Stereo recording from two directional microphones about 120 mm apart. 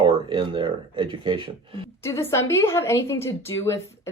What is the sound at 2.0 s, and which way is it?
A woman's voice, 25° left (ahead or behind).